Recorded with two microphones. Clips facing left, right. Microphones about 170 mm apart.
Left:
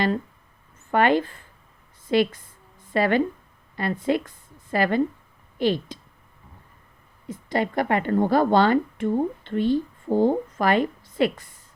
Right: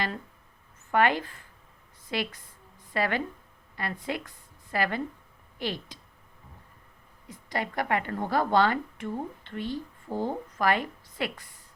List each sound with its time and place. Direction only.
0.9 s a woman's voice: 30° left (ahead or behind)
7.3 s a woman's voice: 25° left (ahead or behind)